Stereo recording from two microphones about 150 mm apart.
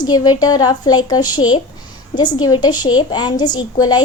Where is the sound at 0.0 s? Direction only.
25° left (ahead or behind).